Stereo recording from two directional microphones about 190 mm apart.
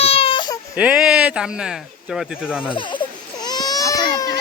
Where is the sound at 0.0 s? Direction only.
30° left (ahead or behind).